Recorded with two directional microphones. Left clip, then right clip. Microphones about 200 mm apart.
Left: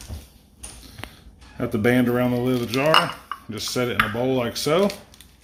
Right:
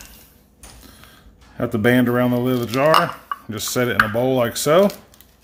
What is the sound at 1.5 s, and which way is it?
Speech, 30° right (ahead or behind).